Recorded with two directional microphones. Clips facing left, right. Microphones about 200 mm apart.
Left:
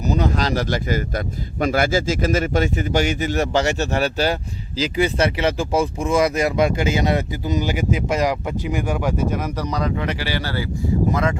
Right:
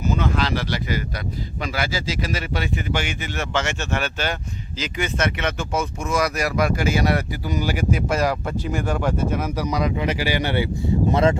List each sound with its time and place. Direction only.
0.0 s speech: 40° left (ahead or behind); by 9.1 s 10° left (ahead or behind)
9.3 s speech: 5° right (ahead or behind); by 11.3 s 30° right (ahead or behind)